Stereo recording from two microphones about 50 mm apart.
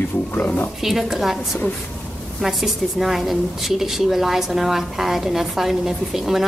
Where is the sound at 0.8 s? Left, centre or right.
Centre.